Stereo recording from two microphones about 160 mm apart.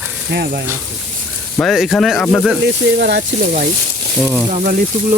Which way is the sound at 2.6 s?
90° right.